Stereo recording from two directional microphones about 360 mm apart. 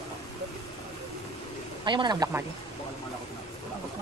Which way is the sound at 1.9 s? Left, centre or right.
Centre.